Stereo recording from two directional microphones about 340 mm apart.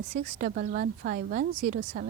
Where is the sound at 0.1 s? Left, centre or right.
Right.